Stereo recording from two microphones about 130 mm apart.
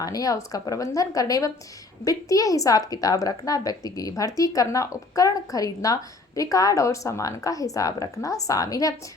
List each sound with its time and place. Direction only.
0.0 s a woman's voice: 30° left (ahead or behind)